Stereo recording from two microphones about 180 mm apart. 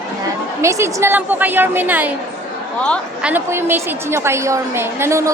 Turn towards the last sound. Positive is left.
turn(degrees=-15)  # may be behind; listen again after turning